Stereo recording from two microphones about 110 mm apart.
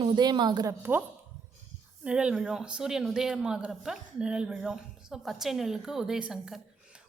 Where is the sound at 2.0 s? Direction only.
10° right (ahead or behind).